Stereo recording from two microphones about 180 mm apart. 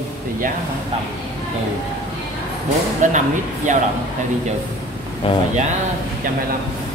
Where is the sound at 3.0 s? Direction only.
45° right (ahead or behind).